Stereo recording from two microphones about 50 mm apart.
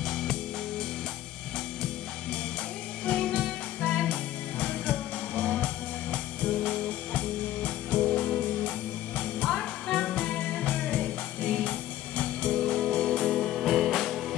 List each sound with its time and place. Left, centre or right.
0.0 s music: centre
3.1 s music: centre